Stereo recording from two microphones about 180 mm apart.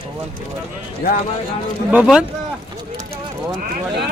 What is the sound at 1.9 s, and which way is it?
Speech, 5° right (ahead or behind).